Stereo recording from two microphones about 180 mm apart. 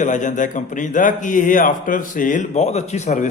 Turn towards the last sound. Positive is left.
turn(degrees=40)  # may be behind; listen again after turning